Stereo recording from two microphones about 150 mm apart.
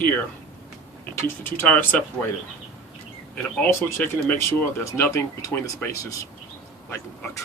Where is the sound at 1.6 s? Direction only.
10° left (ahead or behind).